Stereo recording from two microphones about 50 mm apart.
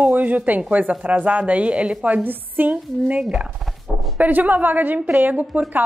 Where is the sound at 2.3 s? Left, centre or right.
Right.